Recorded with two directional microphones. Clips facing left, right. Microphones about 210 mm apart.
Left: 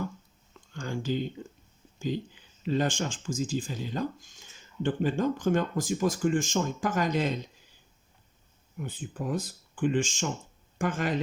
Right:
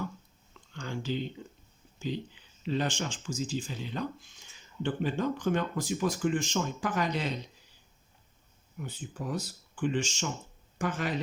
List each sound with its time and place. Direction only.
0.7 s a sound: 45° left (ahead or behind)
2.0 s speech: 45° left (ahead or behind)
8.8 s speech: 50° left (ahead or behind)